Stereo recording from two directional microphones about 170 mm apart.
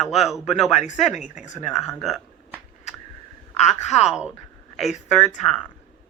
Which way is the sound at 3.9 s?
5° right (ahead or behind).